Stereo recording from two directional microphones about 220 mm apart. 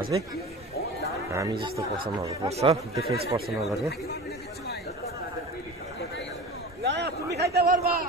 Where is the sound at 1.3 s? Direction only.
15° right (ahead or behind).